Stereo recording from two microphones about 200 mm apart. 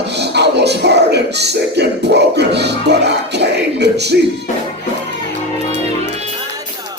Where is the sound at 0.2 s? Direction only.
55° right (ahead or behind).